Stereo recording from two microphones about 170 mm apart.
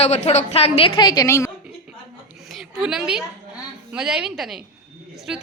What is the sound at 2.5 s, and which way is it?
A woman's voice, 5° right (ahead or behind).